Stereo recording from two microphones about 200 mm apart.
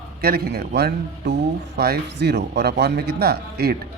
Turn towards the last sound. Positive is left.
turn(degrees=-50)  # may be behind; listen again after turning